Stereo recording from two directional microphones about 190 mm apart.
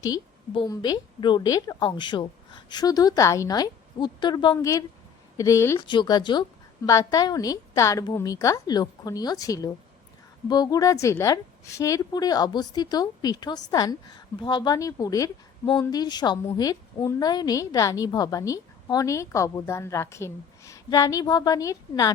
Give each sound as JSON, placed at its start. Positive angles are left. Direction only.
{"t": 0.0, "sound": "a woman's voice", "side_deg": 20}